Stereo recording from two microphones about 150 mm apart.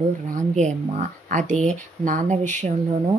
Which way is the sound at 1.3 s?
55° right (ahead or behind).